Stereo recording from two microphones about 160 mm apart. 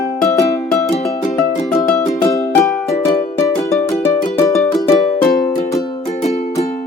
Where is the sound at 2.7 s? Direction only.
Centre (ahead or behind).